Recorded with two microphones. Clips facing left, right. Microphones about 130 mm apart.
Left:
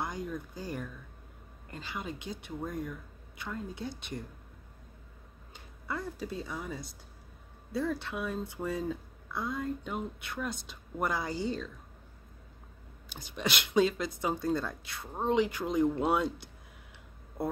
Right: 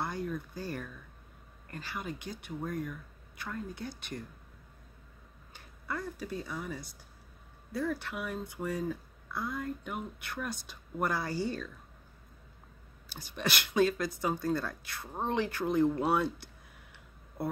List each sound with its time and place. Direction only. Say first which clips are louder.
0.0 s a sound: right 1 dB; 20° left (ahead or behind)
1.7 s speech: even; 20° left (ahead or behind)
5.5 s speech: left 1 dB; 20° left (ahead or behind)
13.1 s speech: left 1 dB; 20° left (ahead or behind)